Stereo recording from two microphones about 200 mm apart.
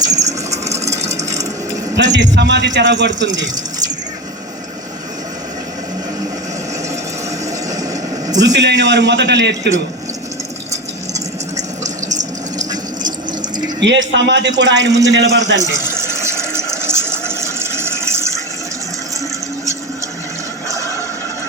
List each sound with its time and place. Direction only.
0.0 s vehicle: 20° right (ahead or behind)
0.8 s a sound: 35° right (ahead or behind)
2.0 s a man's voice: 60° right (ahead or behind)
8.5 s a man's voice: 60° right (ahead or behind)
11.5 s water: 35° right (ahead or behind)
12.5 s a sound: 20° right (ahead or behind)
13.7 s a man's voice: 60° right (ahead or behind)
15.8 s water: 10° right (ahead or behind)